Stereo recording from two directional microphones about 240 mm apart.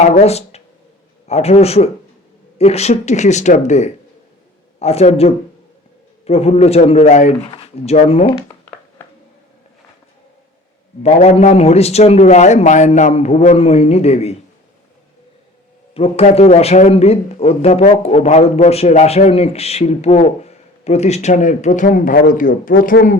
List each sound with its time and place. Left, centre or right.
0.0 s speech: left
11.0 s speech: left
16.0 s speech: left